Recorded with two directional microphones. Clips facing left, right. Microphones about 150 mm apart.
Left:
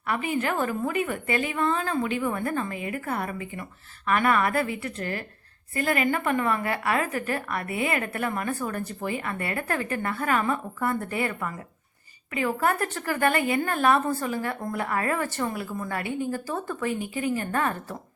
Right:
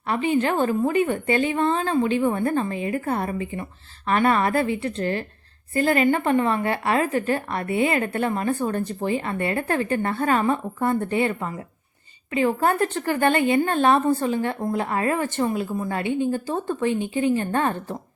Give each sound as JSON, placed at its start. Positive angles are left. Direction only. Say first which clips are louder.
{"t": 0.1, "sound": "a woman's voice", "louder": "right 5 dB", "side_deg": -30}